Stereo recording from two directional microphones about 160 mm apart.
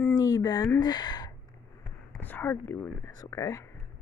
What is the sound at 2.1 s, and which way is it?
Speech, 10° left (ahead or behind).